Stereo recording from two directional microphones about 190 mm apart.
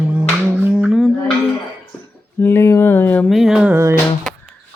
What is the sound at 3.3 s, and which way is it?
Speech, centre (ahead or behind).